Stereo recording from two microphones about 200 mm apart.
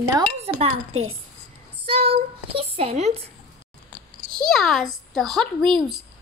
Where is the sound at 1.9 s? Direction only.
30° right (ahead or behind).